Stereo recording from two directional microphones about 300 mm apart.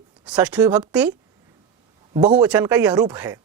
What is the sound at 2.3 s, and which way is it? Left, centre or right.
A woman's voice, centre.